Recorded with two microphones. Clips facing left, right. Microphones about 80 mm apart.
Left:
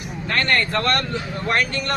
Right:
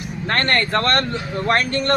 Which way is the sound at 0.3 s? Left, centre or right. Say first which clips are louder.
Right 1 dB; right.